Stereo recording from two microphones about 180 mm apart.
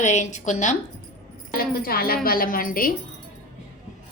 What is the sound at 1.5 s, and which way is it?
A woman's voice, 55° left (ahead or behind).